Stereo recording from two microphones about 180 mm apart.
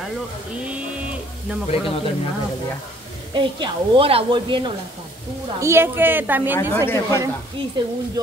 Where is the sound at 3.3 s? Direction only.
30° right (ahead or behind).